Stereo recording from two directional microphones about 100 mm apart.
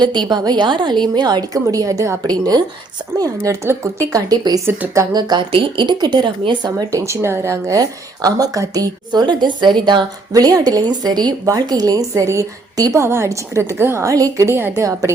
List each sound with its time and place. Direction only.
0.0 s a woman's voice: 45° right (ahead or behind)
4.6 s a woman's voice: 25° right (ahead or behind)
5.5 s a woman's voice: 60° right (ahead or behind); by 7.0 s 45° right (ahead or behind)
7.0 s speech: 25° right (ahead or behind)